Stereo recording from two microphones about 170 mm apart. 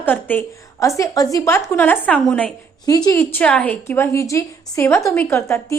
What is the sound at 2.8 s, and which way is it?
A woman's voice, 20° left (ahead or behind).